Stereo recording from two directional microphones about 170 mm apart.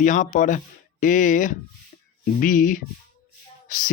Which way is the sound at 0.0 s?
45° left (ahead or behind).